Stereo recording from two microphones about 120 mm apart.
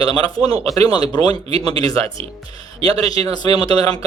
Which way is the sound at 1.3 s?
55° right (ahead or behind).